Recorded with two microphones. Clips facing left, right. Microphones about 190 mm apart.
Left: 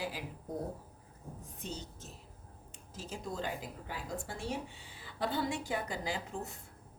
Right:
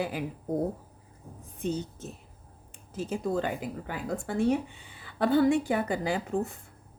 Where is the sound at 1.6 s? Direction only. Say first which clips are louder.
Right 13 dB; 55° right (ahead or behind).